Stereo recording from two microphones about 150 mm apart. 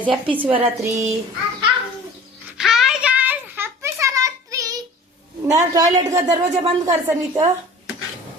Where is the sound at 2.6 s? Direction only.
Centre (ahead or behind); by 4.8 s 25° right (ahead or behind).